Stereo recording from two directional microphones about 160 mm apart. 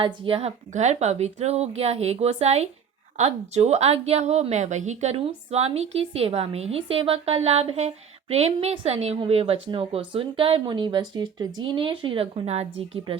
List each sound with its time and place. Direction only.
0.0 s a woman's voice: 35° right (ahead or behind)